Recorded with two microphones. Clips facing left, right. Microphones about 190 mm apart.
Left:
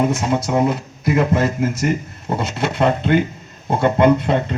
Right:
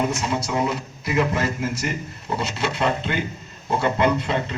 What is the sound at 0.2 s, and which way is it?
Speech, 50° left (ahead or behind).